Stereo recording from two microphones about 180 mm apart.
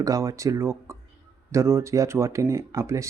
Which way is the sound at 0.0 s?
20° right (ahead or behind).